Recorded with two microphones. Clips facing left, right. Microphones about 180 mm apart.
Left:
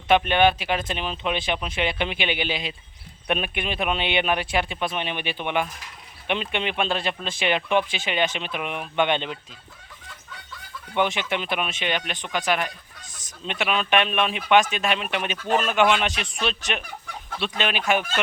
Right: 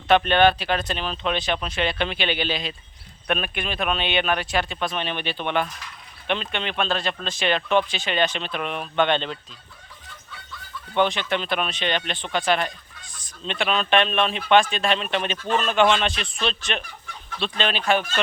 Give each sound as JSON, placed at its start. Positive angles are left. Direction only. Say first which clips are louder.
{"t": 0.1, "sound": "speech", "louder": "right 1 dB", "side_deg": 15}
{"t": 10.9, "sound": "speech", "louder": "right 2 dB", "side_deg": 10}
{"t": 17.6, "sound": "speech", "louder": "right 1 dB", "side_deg": 10}